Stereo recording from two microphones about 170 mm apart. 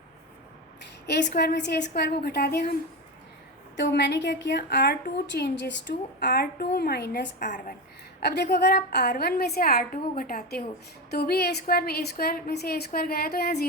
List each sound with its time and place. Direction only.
0.8 s a woman's voice: 90° left
2.0 s a woman's voice: 65° left (ahead or behind)
3.8 s a woman's voice: 90° left; by 13.7 s 70° left (ahead or behind)